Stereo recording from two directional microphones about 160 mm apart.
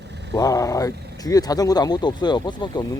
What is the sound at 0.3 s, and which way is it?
Speech, 20° left (ahead or behind).